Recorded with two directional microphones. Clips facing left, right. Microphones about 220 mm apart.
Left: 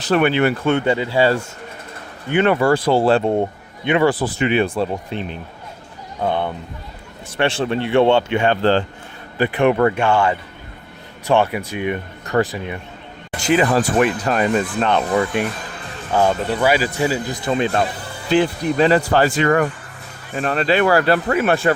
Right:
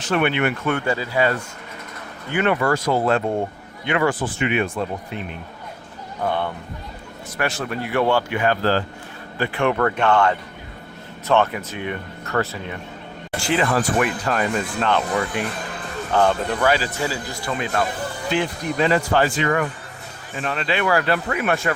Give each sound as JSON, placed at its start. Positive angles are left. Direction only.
{"t": 0.0, "sound": "speech", "side_deg": 35}
{"t": 4.1, "sound": "speech", "side_deg": 35}
{"t": 6.2, "sound": "speech", "side_deg": 20}
{"t": 16.1, "sound": "speech", "side_deg": 10}